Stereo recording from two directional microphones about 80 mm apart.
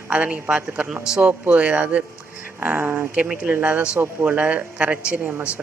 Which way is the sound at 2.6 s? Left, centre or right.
Right.